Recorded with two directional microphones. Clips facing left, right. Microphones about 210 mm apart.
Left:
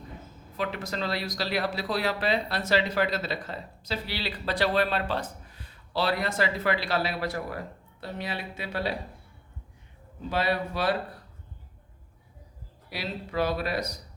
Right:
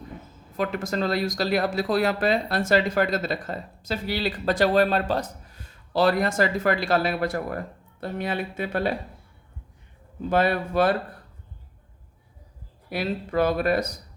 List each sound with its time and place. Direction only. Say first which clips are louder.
0.5 s speech: right 5 dB; 45° right (ahead or behind)
10.2 s speech: right 5 dB; 50° right (ahead or behind)
12.9 s speech: right 7 dB; 50° right (ahead or behind)